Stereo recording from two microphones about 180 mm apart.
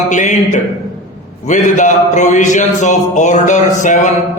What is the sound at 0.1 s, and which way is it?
A man's voice, 45° left (ahead or behind).